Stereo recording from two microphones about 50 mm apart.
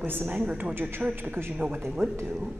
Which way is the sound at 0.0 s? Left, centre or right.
Right.